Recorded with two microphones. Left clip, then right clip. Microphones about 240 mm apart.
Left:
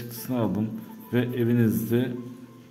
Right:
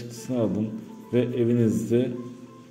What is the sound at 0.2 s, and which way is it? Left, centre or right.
Music, centre.